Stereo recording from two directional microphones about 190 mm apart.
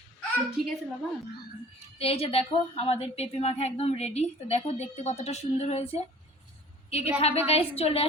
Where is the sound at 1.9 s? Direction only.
30° left (ahead or behind).